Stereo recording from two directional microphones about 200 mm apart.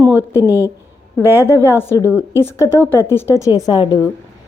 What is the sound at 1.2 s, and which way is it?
Speech, 10° right (ahead or behind).